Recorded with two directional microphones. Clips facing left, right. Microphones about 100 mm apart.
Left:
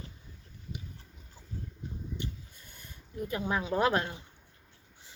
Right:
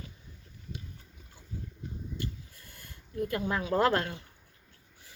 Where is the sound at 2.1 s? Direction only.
20° left (ahead or behind).